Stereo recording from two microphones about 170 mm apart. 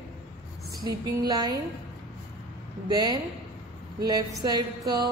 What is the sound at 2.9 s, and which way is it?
A woman's voice, 20° right (ahead or behind).